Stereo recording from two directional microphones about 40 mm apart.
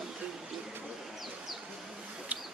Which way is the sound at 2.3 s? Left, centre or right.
Right.